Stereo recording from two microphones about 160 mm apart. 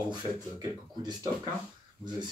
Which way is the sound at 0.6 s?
25° right (ahead or behind).